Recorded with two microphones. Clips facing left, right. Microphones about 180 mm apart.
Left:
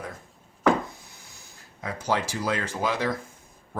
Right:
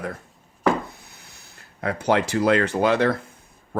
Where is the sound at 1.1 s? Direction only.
65° right (ahead or behind).